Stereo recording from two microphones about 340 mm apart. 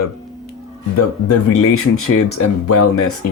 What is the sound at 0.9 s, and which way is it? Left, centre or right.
Speech, left.